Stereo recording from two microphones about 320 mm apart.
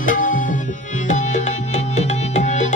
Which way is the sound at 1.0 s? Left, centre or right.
Left.